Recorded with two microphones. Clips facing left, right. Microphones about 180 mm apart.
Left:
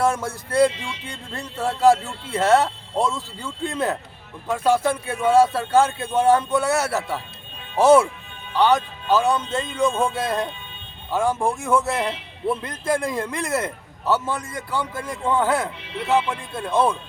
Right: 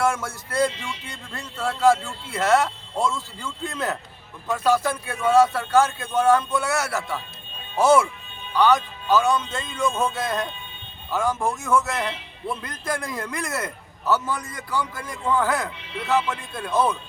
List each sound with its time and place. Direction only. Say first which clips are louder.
0.0 s a man's voice: left 2 dB; 35° left (ahead or behind)